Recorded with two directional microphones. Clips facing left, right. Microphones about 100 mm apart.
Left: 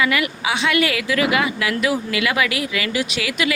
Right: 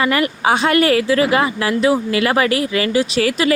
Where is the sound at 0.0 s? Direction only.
40° right (ahead or behind).